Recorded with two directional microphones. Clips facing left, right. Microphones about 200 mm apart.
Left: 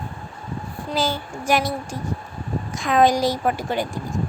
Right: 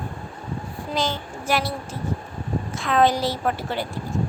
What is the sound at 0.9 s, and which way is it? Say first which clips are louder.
A woman's voice: left 2 dB; 10° left (ahead or behind).